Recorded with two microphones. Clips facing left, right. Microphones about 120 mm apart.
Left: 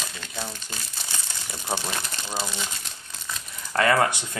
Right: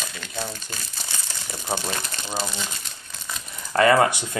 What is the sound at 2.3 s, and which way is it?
Speech, 20° right (ahead or behind).